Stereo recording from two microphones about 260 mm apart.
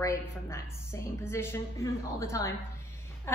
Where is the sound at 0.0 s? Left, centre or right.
Centre.